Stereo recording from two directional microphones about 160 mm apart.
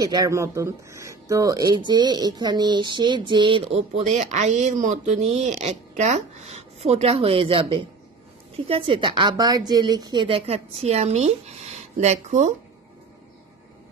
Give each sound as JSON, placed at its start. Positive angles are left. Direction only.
{"t": 0.0, "sound": "a woman's voice", "side_deg": -25}